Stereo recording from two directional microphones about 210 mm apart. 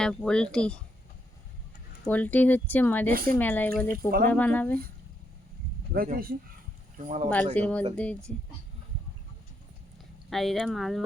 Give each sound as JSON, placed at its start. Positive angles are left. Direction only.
{"t": 0.0, "sound": "speech", "side_deg": 0}
{"t": 2.0, "sound": "speech", "side_deg": 5}
{"t": 5.9, "sound": "speech", "side_deg": -45}
{"t": 7.5, "sound": "speech", "side_deg": 5}
{"t": 10.2, "sound": "speech", "side_deg": 0}